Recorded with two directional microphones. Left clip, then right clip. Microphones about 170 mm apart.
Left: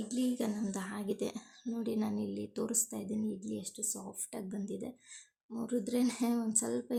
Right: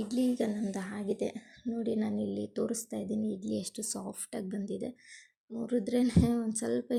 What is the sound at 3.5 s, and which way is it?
Speech, 40° right (ahead or behind).